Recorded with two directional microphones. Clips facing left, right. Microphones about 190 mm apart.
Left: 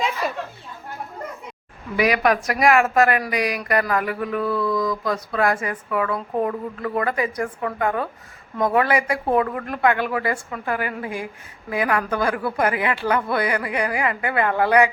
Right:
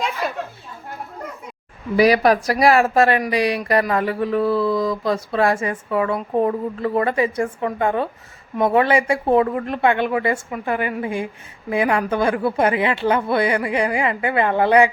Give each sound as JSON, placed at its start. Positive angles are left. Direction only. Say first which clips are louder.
{"t": 2.0, "sound": "speech", "louder": "right 4 dB", "side_deg": -35}